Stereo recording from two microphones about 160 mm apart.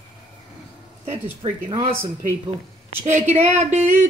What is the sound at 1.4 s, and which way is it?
Speech, 25° right (ahead or behind).